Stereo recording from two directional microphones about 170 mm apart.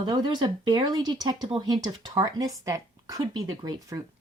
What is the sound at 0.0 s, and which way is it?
Speech, 25° right (ahead or behind).